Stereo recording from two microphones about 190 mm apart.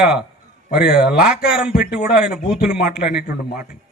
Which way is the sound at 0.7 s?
55° left (ahead or behind).